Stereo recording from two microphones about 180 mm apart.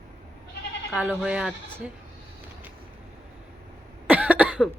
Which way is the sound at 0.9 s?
5° right (ahead or behind).